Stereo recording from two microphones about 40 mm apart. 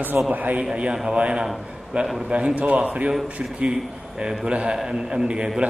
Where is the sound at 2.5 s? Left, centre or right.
Right.